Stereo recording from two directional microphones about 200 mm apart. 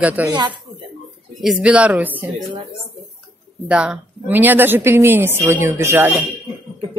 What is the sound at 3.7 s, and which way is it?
A woman's voice, 5° right (ahead or behind).